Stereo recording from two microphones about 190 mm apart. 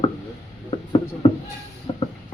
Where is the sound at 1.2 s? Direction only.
30° left (ahead or behind).